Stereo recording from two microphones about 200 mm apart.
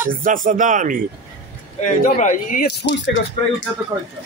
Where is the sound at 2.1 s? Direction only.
40° left (ahead or behind); by 3.2 s 65° left (ahead or behind).